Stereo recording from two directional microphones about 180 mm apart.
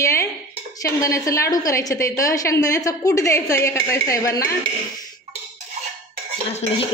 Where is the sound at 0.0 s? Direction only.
15° left (ahead or behind).